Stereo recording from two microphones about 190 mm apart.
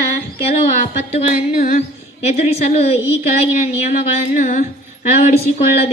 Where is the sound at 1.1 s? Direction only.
40° left (ahead or behind).